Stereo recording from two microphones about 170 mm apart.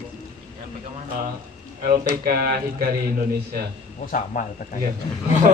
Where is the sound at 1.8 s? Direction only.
60° right (ahead or behind).